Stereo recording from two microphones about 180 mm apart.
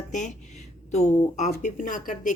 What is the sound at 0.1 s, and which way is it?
Speech, 45° left (ahead or behind).